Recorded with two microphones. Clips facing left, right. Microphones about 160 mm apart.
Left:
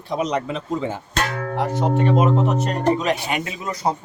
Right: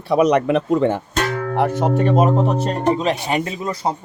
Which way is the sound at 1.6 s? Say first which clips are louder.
Right 2 dB; 55° right (ahead or behind).